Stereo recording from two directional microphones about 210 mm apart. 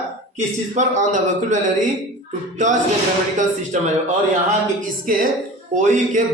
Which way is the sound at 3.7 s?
35° right (ahead or behind).